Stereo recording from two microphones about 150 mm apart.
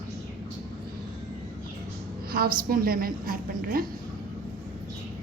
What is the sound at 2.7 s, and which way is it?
A woman's voice, 75° right (ahead or behind).